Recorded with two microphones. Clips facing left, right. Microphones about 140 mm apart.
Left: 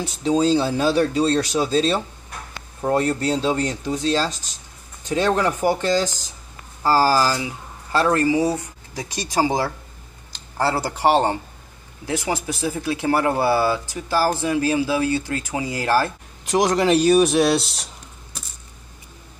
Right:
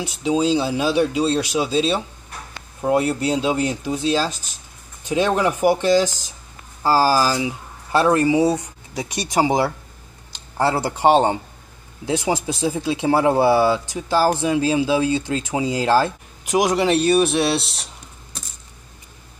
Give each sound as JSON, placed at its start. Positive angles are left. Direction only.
{"t": 0.2, "sound": "speech", "side_deg": -5}
{"t": 6.0, "sound": "speech", "side_deg": 15}
{"t": 6.8, "sound": "speech", "side_deg": -15}
{"t": 16.4, "sound": "speech", "side_deg": -5}